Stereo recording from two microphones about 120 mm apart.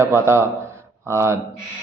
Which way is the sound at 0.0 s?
20° right (ahead or behind).